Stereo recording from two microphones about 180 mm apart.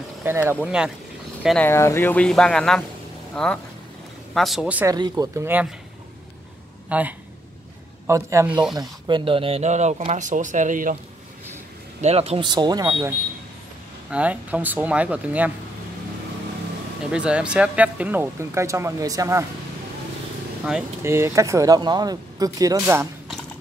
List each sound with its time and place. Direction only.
0.2 s speech: 10° right (ahead or behind)
1.6 s speech: 15° left (ahead or behind); by 4.8 s 5° right (ahead or behind)
4.8 s speech: 20° right (ahead or behind)
6.9 s speech: 10° right (ahead or behind); by 11.0 s 45° right (ahead or behind)
12.0 s speech: 35° right (ahead or behind)
14.1 s speech: 10° right (ahead or behind)
17.1 s speech: 5° right (ahead or behind)
21.0 s speech: 15° right (ahead or behind)